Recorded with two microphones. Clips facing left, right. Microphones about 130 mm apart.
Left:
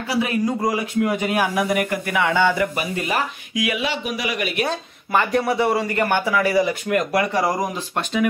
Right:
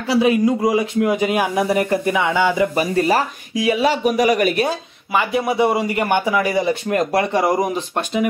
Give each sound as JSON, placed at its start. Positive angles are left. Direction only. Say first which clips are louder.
{"t": 0.1, "sound": "speech", "louder": "right 6 dB", "side_deg": -20}
{"t": 2.7, "sound": "speech", "louder": "right 7 dB", "side_deg": -35}
{"t": 4.6, "sound": "speech", "louder": "right 2 dB", "side_deg": -5}